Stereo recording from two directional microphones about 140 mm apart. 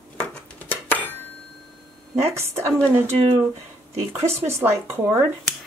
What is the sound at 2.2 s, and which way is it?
Speech, 20° right (ahead or behind).